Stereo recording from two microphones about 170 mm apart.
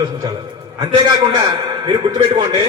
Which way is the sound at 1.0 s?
25° right (ahead or behind).